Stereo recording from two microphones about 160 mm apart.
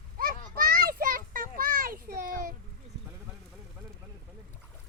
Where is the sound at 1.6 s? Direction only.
65° right (ahead or behind).